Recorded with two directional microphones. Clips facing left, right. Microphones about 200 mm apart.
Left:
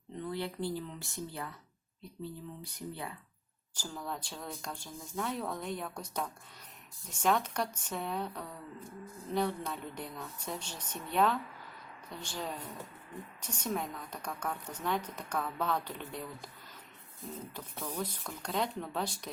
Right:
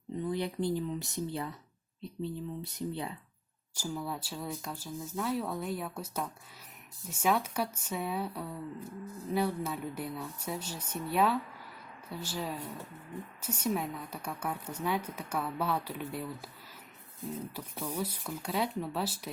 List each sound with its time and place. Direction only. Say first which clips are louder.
0.2 s speech: right 3 dB; 15° right (ahead or behind)
3.8 s a woman's voice: right 4 dB; 10° right (ahead or behind)
17.5 s a woman's voice: right 3 dB; 10° right (ahead or behind)